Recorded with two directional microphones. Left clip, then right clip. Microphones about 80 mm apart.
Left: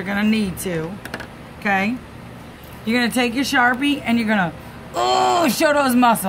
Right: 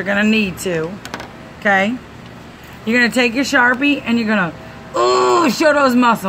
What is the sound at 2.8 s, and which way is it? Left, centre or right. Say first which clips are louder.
A woman's voice: right 5 dB; left.